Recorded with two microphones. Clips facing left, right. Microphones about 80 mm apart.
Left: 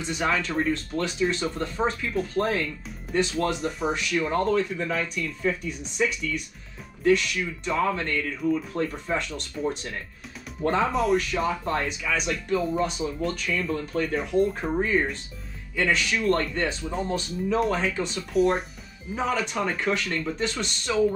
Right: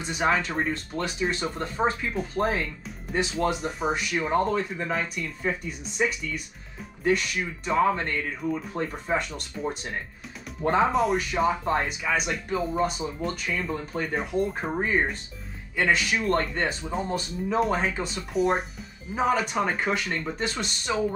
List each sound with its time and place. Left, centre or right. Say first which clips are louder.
0.0 s speech: right 1 dB; centre
1.9 s speech: right 1 dB; centre
2.1 s speech: left 1 dB; centre
4.9 s speech: right 1 dB; centre
5.2 s speech: left 2 dB; centre
7.1 s speech: left 3 dB; centre
10.9 s speech: left 1 dB; centre
12.6 s speech: left 1 dB; centre
13.5 s speech: left 2 dB; centre
14.1 s speech: left 3 dB; centre
14.8 s speech: left 1 dB; right
15.7 s speech: right 1 dB; centre
19.1 s speech: right 2 dB; centre